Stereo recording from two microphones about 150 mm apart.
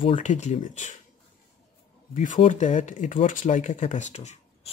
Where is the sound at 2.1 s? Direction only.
60° left (ahead or behind).